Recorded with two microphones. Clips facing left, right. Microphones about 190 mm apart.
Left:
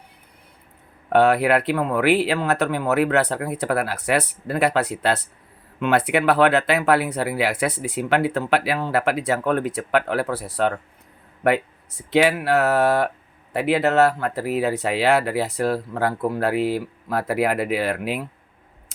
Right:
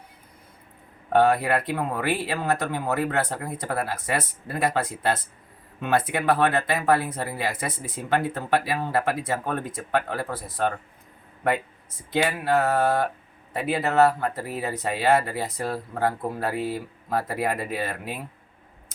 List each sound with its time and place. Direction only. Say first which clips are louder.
1.1 s speech: left 3 dB; 75° left (ahead or behind)